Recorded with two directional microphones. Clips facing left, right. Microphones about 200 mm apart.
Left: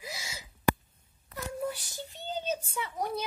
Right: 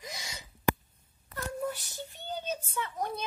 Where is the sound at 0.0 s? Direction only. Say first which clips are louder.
Left 1 dB; 5° left (ahead or behind).